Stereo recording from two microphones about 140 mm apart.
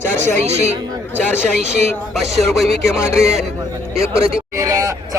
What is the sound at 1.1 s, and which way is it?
Speech, 15° left (ahead or behind).